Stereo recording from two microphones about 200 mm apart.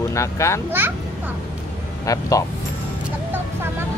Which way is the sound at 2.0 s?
15° left (ahead or behind).